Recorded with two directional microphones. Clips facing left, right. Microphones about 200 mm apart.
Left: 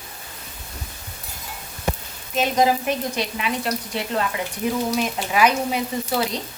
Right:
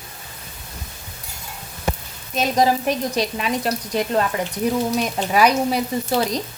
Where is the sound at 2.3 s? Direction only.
35° right (ahead or behind).